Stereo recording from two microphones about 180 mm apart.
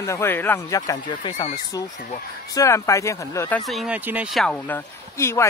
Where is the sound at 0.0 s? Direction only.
15° left (ahead or behind).